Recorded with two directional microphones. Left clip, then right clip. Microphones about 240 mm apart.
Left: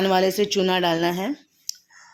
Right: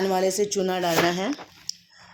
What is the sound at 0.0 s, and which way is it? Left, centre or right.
Speech, left.